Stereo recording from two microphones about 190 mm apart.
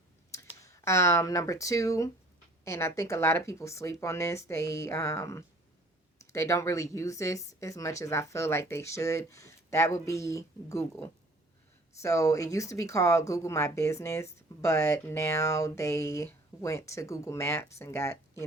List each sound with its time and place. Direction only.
0.6 s speech: 15° left (ahead or behind)
12.0 s speech: 15° left (ahead or behind)